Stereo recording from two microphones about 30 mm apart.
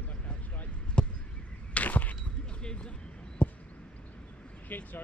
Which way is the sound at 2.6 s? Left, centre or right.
Left.